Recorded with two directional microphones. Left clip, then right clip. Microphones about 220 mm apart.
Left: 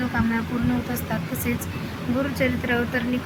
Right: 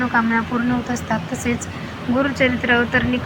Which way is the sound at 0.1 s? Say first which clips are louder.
Right 9 dB; 5° right (ahead or behind).